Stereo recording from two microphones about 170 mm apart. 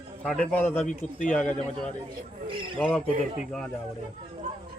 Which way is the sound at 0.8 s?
50° left (ahead or behind).